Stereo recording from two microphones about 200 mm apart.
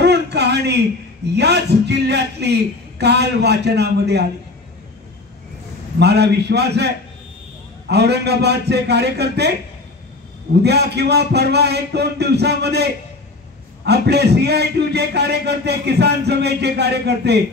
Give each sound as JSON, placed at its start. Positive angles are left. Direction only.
{"t": 0.0, "sound": "a sound", "side_deg": -55}
{"t": 1.3, "sound": "a man's voice", "side_deg": -55}
{"t": 5.9, "sound": "a man's voice", "side_deg": -55}
{"t": 7.9, "sound": "a man's voice", "side_deg": -55}